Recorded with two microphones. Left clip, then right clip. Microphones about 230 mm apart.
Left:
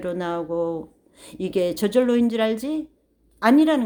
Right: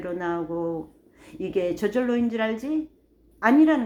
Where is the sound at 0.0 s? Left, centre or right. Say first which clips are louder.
Left 2 dB; left.